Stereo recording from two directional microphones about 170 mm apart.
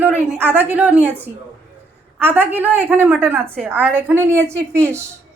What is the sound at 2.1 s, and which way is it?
Speech, 10° right (ahead or behind).